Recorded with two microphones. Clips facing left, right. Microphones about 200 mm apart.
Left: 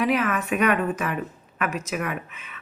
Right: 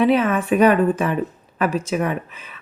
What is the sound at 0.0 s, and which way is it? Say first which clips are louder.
Speech: right 6 dB; 30° right (ahead or behind).